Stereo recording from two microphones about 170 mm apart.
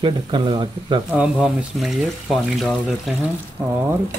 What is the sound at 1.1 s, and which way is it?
Speech, 5° right (ahead or behind).